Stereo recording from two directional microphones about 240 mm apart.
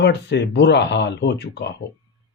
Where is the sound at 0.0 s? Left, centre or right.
Left.